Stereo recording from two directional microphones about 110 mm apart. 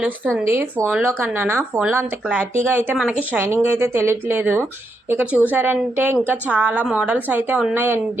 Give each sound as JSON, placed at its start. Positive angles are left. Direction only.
{"t": 0.0, "sound": "a woman's voice", "side_deg": -10}
{"t": 0.4, "sound": "a woman's voice", "side_deg": -25}